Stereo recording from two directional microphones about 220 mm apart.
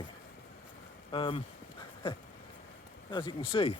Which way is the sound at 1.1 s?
25° left (ahead or behind).